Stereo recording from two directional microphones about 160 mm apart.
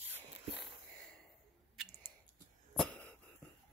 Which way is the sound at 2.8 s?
10° left (ahead or behind).